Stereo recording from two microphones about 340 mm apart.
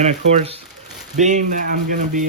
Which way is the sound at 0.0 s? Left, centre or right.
Centre.